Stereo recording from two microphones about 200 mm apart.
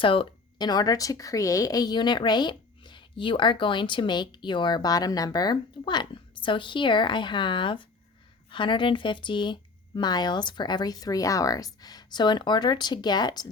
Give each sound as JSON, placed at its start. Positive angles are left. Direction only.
{"t": 0.0, "sound": "speech", "side_deg": 25}